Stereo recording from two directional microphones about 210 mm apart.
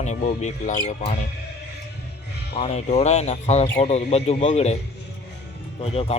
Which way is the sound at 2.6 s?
30° left (ahead or behind).